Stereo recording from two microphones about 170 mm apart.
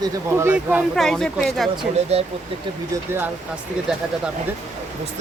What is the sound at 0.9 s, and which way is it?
Speech, centre (ahead or behind).